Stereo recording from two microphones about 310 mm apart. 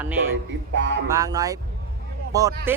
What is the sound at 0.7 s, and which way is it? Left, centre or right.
Music, right.